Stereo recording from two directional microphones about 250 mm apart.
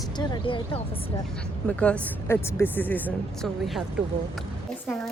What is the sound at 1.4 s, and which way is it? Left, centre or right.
A woman's voice, centre.